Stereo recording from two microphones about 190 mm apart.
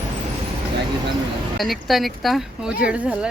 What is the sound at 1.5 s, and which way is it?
Speech, centre (ahead or behind).